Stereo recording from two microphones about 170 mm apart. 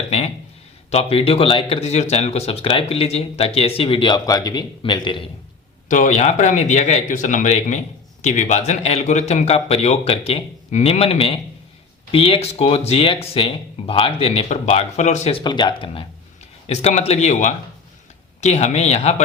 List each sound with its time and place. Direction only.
0.9 s speech: 35° left (ahead or behind)
5.9 s speech: 45° left (ahead or behind)